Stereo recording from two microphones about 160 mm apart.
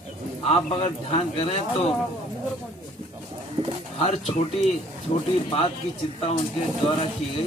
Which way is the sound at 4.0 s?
40° left (ahead or behind).